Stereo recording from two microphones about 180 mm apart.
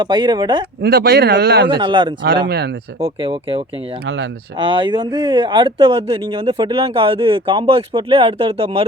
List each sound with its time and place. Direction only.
0.0 s speech: 25° right (ahead or behind)
0.8 s speech: 60° right (ahead or behind)
1.7 s speech: 25° right (ahead or behind)